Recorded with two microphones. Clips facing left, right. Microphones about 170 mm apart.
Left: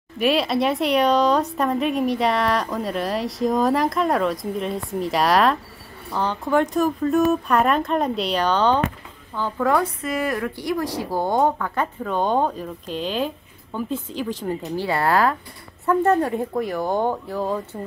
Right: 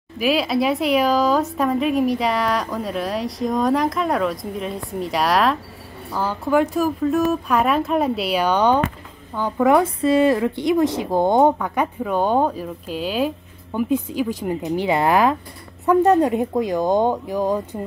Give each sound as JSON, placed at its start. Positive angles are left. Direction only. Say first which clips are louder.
{"t": 0.2, "sound": "speech", "louder": "right 1 dB", "side_deg": 0}
{"t": 10.0, "sound": "speech", "louder": "right 8 dB", "side_deg": -30}